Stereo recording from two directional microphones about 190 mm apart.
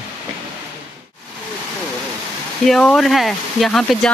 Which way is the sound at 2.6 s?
Centre (ahead or behind).